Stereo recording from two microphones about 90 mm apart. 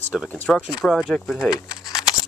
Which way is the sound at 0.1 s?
5° right (ahead or behind).